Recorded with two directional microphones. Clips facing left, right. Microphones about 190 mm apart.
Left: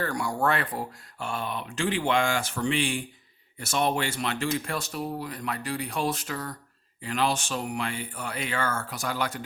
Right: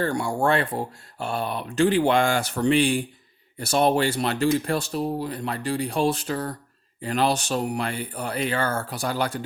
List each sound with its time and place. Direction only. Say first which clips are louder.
0.0 s speech: right 4 dB; 25° right (ahead or behind)